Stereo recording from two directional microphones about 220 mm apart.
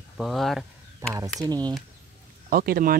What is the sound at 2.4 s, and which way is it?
Speech, 40° right (ahead or behind).